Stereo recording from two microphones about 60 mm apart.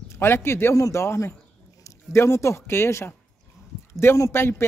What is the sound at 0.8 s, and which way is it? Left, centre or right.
A man's voice, left.